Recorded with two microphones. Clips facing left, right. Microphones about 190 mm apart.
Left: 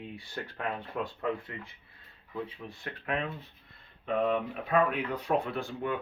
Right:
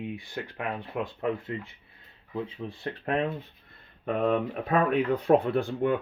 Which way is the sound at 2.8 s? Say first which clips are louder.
Right 6 dB; 40° right (ahead or behind).